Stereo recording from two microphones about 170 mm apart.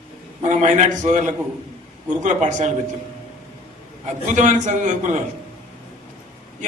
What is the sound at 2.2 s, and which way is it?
Speech, 45° right (ahead or behind).